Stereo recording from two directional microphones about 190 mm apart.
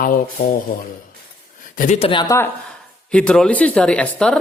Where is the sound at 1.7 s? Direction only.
40° left (ahead or behind).